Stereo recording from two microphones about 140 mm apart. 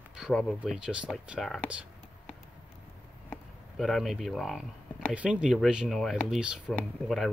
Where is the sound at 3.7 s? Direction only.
Centre (ahead or behind).